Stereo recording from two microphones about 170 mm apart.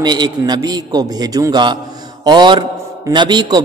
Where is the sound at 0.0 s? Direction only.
25° right (ahead or behind).